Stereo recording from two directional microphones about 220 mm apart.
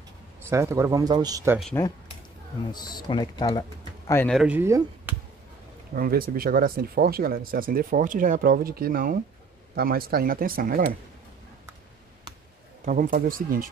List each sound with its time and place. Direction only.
0.5 s speech: 15° right (ahead or behind)
2.7 s speech: 20° left (ahead or behind)
4.4 s speech: 10° right (ahead or behind)
5.9 s speech: 40° right (ahead or behind)
12.8 s speech: 40° right (ahead or behind)